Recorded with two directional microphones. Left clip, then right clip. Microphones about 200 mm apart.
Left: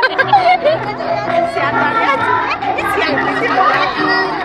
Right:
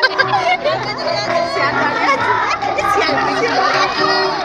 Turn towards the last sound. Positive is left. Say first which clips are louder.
# even
turn(degrees=-5)  # may be behind; listen again after turning